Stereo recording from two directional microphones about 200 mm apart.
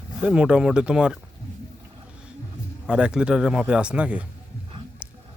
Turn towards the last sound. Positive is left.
turn(degrees=-5)  # may be behind; listen again after turning